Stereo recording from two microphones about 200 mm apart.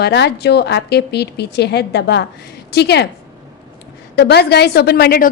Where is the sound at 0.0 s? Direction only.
60° left (ahead or behind).